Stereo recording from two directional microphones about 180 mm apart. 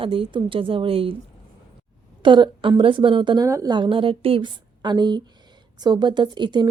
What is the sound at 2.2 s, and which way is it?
A woman's voice, 25° right (ahead or behind).